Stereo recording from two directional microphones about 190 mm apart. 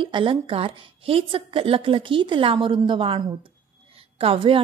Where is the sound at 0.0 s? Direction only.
25° right (ahead or behind).